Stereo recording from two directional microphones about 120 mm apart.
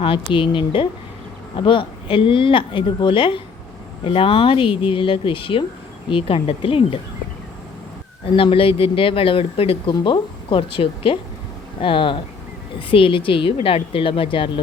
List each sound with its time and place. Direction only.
0.0 s speech: 45° left (ahead or behind)
8.2 s speech: 50° left (ahead or behind)